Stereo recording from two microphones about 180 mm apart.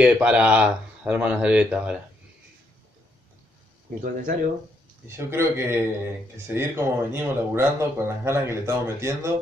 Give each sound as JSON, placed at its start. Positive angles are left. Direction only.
{"t": 0.0, "sound": "speech", "side_deg": -5}
{"t": 4.0, "sound": "speech", "side_deg": -50}
{"t": 5.0, "sound": "speech", "side_deg": -15}